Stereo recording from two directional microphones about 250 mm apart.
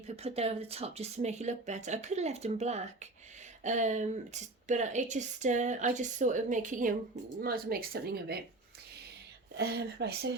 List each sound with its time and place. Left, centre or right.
0.2 s speech: right
9.6 s speech: right